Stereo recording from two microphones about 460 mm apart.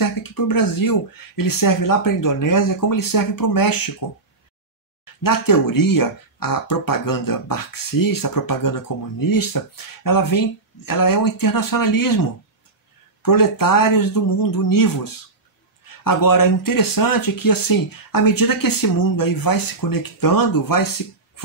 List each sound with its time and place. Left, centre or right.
0.0 s speech: left
5.2 s speech: left